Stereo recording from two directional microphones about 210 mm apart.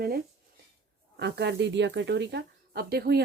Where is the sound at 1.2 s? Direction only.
55° right (ahead or behind).